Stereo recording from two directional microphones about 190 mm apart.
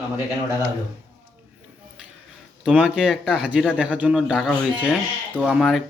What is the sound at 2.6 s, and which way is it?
Speech, 5° right (ahead or behind).